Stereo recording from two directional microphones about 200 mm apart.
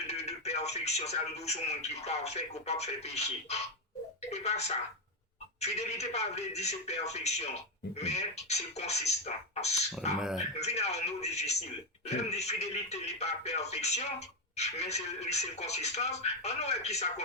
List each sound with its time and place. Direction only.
0.1 s speech: 30° left (ahead or behind)
10.2 s speech: 5° right (ahead or behind)
10.6 s speech: 35° left (ahead or behind)